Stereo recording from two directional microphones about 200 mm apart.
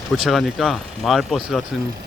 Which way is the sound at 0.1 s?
Centre (ahead or behind).